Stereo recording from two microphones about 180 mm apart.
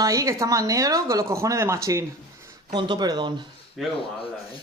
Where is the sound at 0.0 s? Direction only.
20° right (ahead or behind).